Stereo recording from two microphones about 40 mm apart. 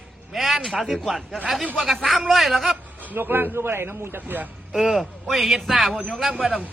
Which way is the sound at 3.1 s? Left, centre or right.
Right.